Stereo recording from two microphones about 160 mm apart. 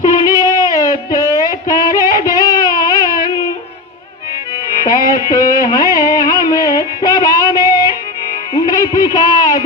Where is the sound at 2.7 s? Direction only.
20° left (ahead or behind).